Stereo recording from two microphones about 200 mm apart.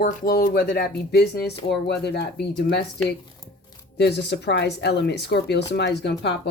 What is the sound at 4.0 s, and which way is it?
Speech, 55° left (ahead or behind).